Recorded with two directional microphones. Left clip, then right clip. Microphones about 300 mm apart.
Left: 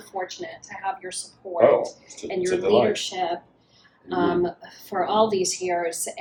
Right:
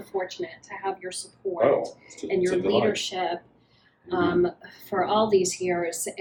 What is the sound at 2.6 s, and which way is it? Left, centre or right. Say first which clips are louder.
Speech: left 4 dB; centre.